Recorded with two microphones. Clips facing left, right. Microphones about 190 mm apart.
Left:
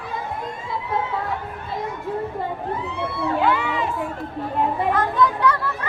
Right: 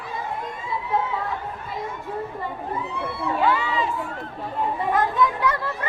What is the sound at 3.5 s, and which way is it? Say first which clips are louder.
Crowd: left 1 dB; 60° left (ahead or behind).